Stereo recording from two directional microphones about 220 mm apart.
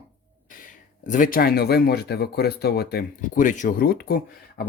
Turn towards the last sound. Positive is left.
turn(degrees=45)  # may be behind; listen again after turning